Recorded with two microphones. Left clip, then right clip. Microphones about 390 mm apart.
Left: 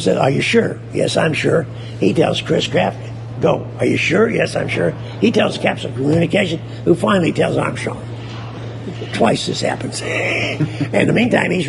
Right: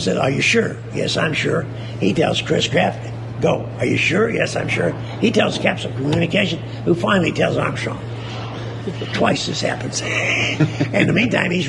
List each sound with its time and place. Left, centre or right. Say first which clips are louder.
0.0 s speech: left 2 dB; left
9.6 s speech: left 1 dB; left